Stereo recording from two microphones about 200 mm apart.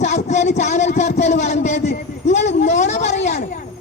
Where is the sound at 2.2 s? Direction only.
35° left (ahead or behind).